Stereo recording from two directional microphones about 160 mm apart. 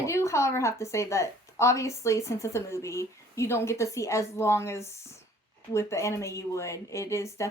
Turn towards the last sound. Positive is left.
turn(degrees=20)  # may be behind; listen again after turning